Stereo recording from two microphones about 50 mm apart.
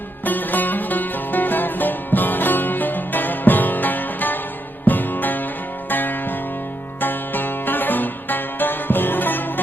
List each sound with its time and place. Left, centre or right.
0.3 s music: left